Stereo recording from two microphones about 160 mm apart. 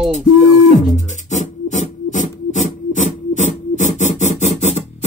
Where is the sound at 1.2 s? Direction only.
50° left (ahead or behind).